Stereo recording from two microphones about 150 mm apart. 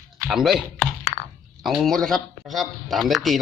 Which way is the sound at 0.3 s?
Centre (ahead or behind).